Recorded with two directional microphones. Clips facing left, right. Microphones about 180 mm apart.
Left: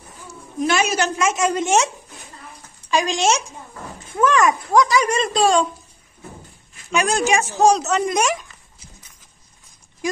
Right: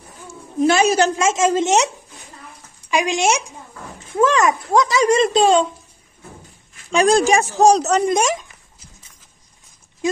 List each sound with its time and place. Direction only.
0.3 s a woman's voice: 35° right (ahead or behind)
2.9 s speech: 15° right (ahead or behind)
4.2 s a child's voice: 25° right (ahead or behind)
6.9 s speech: 35° right (ahead or behind)